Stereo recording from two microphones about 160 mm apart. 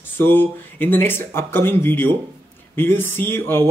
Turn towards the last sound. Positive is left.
turn(degrees=15)  # may be behind; listen again after turning